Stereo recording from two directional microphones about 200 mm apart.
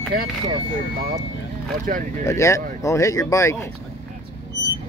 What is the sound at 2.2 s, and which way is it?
Speech, 15° left (ahead or behind).